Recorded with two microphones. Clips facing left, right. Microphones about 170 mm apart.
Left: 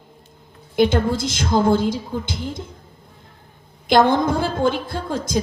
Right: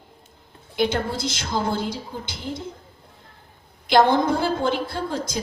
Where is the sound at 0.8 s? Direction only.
50° left (ahead or behind).